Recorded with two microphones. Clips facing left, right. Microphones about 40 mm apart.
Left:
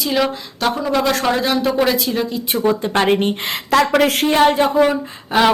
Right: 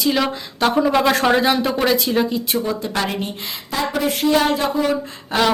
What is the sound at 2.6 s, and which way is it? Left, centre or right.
Speech, left.